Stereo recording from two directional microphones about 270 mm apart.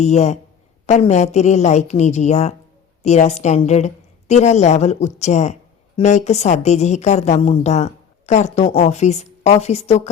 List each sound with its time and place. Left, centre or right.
0.0 s a woman's voice: left